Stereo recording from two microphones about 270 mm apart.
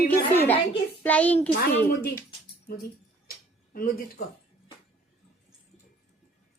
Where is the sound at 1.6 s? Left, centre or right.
Left.